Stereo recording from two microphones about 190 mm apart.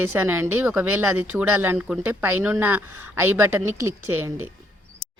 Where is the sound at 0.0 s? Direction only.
10° right (ahead or behind).